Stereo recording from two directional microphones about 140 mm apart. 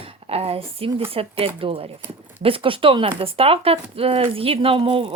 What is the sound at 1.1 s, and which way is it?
Speech, 45° right (ahead or behind).